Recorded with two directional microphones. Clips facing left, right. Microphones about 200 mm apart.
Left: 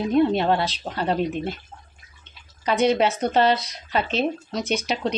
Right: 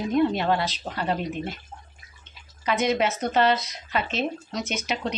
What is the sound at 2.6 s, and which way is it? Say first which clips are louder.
Speech: left 4 dB; 30° left (ahead or behind).